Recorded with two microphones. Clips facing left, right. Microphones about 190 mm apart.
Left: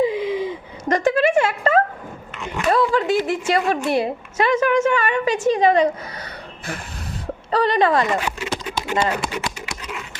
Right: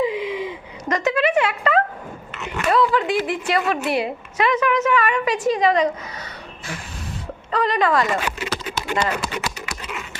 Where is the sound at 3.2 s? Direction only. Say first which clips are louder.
Left 2 dB; 45° left (ahead or behind).